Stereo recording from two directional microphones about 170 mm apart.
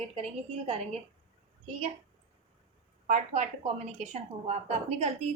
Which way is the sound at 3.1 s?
45° right (ahead or behind).